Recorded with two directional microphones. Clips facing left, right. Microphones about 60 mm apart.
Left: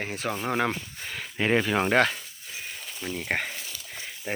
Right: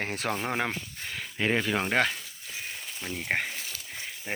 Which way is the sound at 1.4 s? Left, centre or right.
Left.